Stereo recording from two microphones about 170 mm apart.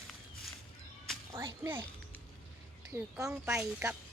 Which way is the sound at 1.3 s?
20° right (ahead or behind).